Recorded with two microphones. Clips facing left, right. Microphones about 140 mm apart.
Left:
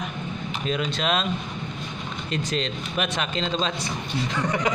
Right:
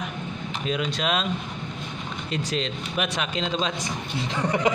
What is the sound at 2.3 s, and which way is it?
Speech, 5° right (ahead or behind).